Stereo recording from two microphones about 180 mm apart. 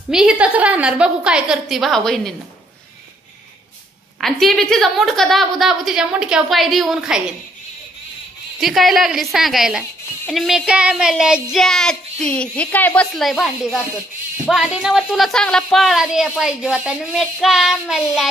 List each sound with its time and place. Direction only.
0.1 s speech: 5° right (ahead or behind)
4.2 s speech: centre (ahead or behind)
8.5 s speech: centre (ahead or behind)